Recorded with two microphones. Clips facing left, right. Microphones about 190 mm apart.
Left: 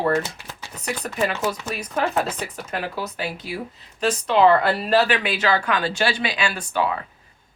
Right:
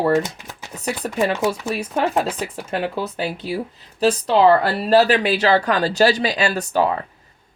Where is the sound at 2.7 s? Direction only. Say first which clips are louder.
Right 5 dB; 30° right (ahead or behind).